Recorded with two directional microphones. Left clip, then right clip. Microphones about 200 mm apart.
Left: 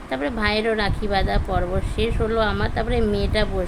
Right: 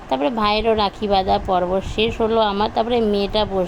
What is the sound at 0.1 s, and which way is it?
Speech, 15° right (ahead or behind).